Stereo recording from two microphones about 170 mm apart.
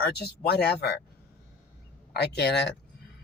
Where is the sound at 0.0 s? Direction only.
70° left (ahead or behind).